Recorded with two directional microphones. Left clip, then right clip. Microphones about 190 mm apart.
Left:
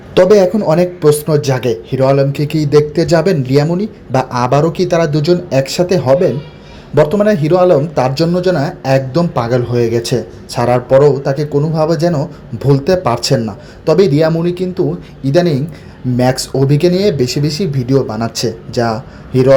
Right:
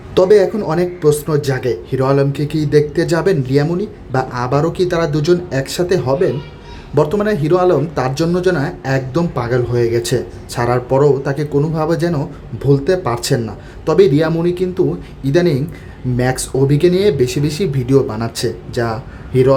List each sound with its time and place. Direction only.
0.1 s speech: 15° left (ahead or behind)